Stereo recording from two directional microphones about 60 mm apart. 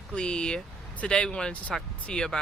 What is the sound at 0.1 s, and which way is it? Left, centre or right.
Speech, centre.